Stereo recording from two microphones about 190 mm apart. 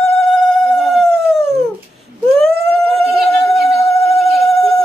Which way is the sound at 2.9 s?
30° right (ahead or behind).